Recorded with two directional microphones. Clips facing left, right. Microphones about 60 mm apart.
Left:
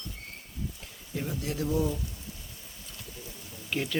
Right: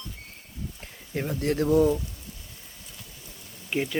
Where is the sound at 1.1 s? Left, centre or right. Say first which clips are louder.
Right 7 dB; right.